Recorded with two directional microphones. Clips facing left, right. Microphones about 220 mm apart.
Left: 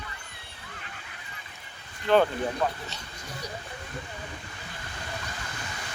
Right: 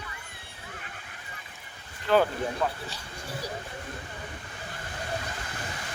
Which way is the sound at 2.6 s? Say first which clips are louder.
Left 1 dB; 5° left (ahead or behind).